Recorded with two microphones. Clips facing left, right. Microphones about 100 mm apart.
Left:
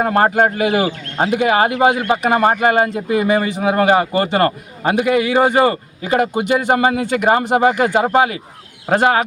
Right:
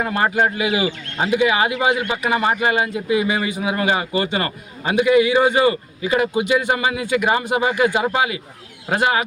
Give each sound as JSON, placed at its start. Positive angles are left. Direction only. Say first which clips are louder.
{"t": 0.0, "sound": "speech", "louder": "left 5 dB", "side_deg": 45}